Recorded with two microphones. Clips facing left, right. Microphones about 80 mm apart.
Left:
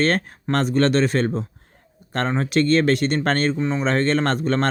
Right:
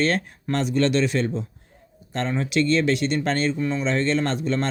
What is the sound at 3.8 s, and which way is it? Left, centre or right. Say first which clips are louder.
Speech: left 3 dB; left.